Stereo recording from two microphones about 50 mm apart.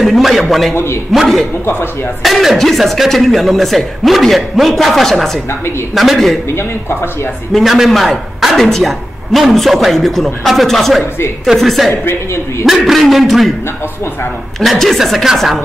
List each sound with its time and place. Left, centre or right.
0.0 s speech: centre
7.5 s speech: centre
11.9 s a woman's voice: left
12.6 s speech: centre
14.6 s speech: centre